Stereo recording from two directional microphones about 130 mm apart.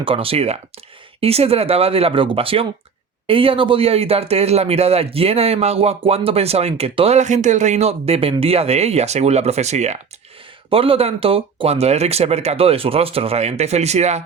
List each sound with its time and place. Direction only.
0.0 s speech: 45° right (ahead or behind); by 10.0 s 60° right (ahead or behind)
10.7 s speech: 45° right (ahead or behind)